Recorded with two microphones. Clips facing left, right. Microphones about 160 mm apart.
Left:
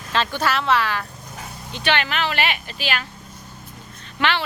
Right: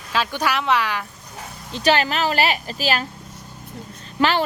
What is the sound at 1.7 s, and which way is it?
Speech, 35° right (ahead or behind).